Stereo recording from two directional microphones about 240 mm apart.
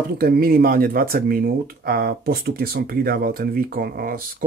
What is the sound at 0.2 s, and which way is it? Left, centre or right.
Speech, right.